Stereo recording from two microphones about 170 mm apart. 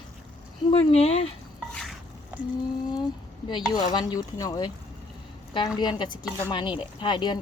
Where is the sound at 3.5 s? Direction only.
25° left (ahead or behind).